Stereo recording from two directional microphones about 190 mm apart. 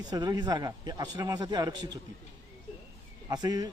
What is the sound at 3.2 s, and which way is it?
Speech, 20° right (ahead or behind).